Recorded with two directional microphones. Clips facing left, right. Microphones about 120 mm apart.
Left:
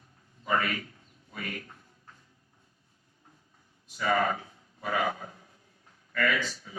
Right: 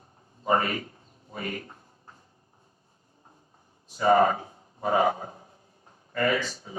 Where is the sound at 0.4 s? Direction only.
30° right (ahead or behind).